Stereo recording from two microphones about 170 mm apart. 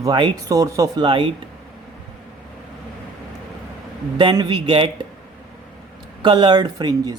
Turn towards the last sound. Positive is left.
turn(degrees=-25)  # may be behind; listen again after turning